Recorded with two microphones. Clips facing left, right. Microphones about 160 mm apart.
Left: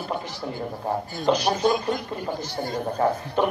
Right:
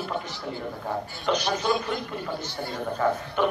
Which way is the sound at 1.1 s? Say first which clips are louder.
Left 4 dB; 35° left (ahead or behind).